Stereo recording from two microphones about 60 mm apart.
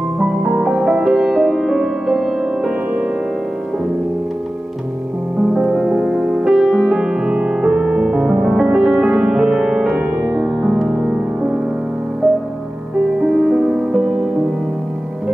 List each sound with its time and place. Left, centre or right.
0.2 s music: centre
5.5 s music: centre
13.2 s music: centre